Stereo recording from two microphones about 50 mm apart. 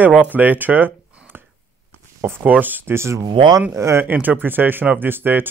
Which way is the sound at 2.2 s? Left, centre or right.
Right.